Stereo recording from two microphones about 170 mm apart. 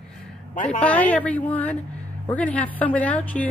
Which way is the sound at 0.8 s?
10° left (ahead or behind).